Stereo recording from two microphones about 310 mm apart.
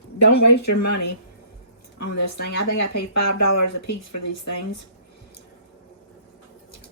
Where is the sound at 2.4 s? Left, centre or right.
Left.